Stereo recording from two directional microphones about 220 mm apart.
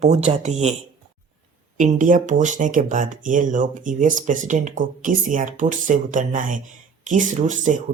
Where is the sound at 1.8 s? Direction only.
35° right (ahead or behind).